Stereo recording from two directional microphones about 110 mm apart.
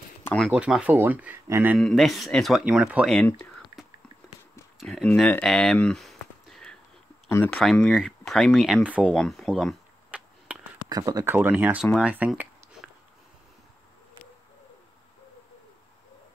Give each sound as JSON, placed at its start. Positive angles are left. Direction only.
{"t": 0.5, "sound": "speech", "side_deg": -10}
{"t": 1.8, "sound": "speech", "side_deg": 0}
{"t": 2.6, "sound": "speech", "side_deg": -10}
{"t": 4.7, "sound": "speech", "side_deg": 5}
{"t": 5.8, "sound": "a sound", "side_deg": 5}
{"t": 7.2, "sound": "speech", "side_deg": 20}
{"t": 7.5, "sound": "speech", "side_deg": 5}
{"t": 8.8, "sound": "speech", "side_deg": -10}
{"t": 9.1, "sound": "speech", "side_deg": 5}
{"t": 10.1, "sound": "a sound", "side_deg": -15}
{"t": 10.9, "sound": "speech", "side_deg": -35}
{"t": 11.2, "sound": "speech", "side_deg": -20}